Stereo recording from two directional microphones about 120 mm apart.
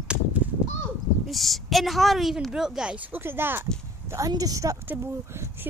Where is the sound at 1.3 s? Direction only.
Centre (ahead or behind); by 4.8 s 30° right (ahead or behind).